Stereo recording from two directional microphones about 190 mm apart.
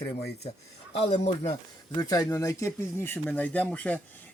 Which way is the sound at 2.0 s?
20° left (ahead or behind).